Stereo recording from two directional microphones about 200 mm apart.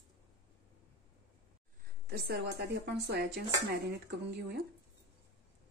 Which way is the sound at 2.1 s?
55° right (ahead or behind).